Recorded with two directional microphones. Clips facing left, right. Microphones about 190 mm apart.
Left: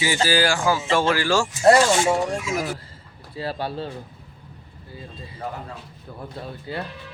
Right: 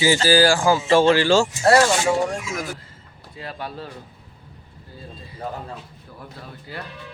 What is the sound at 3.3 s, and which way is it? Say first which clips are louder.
Speech: left 5 dB; 30° left (ahead or behind).